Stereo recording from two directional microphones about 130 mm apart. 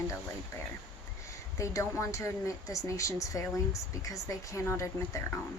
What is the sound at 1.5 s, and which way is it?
Speech, 25° left (ahead or behind).